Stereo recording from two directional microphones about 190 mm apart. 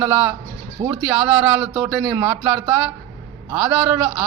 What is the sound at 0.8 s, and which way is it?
Speech, 20° right (ahead or behind).